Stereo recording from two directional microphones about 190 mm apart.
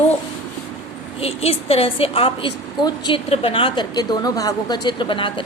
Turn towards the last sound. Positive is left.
turn(degrees=25)  # may be behind; listen again after turning